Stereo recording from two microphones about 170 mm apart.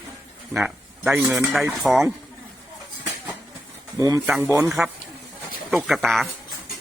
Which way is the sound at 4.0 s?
20° right (ahead or behind).